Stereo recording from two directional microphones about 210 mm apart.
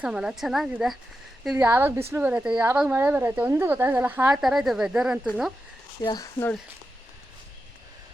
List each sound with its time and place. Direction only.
0.0 s a woman's voice: 5° right (ahead or behind)
5.2 s speech: 5° left (ahead or behind)
6.0 s speech: 20° left (ahead or behind)